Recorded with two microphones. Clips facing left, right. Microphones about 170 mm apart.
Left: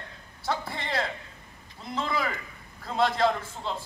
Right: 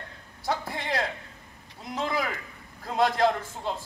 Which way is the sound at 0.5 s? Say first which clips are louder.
Right 1 dB; 15° right (ahead or behind).